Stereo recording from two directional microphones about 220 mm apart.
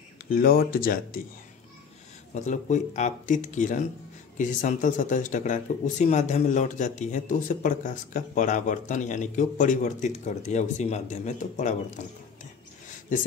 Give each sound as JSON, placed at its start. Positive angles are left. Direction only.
{"t": 0.3, "sound": "speech", "side_deg": 40}
{"t": 2.3, "sound": "speech", "side_deg": 35}